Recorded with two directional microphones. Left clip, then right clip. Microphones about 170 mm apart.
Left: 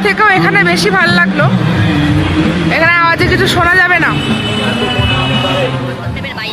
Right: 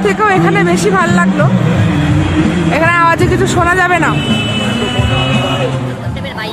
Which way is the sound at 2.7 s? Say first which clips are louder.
Left 1 dB; 15° right (ahead or behind).